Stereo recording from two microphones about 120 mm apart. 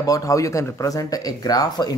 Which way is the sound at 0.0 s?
30° left (ahead or behind).